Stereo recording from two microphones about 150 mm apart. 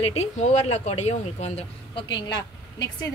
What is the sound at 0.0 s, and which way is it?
Speech, 45° left (ahead or behind).